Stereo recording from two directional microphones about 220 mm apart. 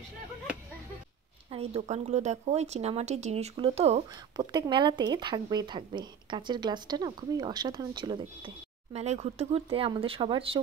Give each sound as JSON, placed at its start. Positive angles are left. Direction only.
{"t": 1.5, "sound": "speech", "side_deg": -25}